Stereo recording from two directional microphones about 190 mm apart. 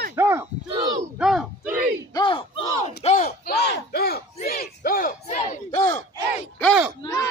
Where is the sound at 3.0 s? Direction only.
35° left (ahead or behind).